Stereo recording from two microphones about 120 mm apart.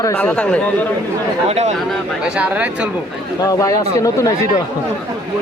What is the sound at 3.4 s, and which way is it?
Speech, 30° left (ahead or behind).